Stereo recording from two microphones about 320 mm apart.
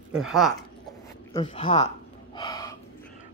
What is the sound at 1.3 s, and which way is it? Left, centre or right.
Speech, centre.